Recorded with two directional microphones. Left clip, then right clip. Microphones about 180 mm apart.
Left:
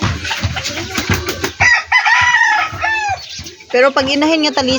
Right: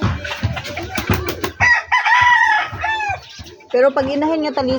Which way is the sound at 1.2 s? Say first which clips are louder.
Left 2 dB; 45° right (ahead or behind).